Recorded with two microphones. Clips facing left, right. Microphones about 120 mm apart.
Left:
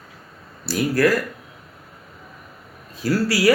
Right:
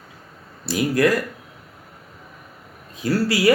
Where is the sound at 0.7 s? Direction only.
20° right (ahead or behind).